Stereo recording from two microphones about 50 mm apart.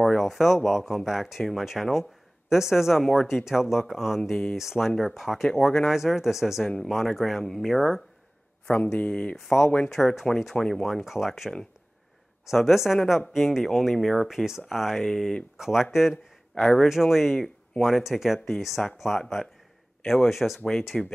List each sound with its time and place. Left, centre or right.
0.0 s a sound: centre
0.7 s speech: centre
9.1 s speech: centre
9.4 s speech: centre
11.1 s speech: centre
14.2 s speech: centre
15.0 s speech: centre
15.5 s speech: centre
20.9 s speech: centre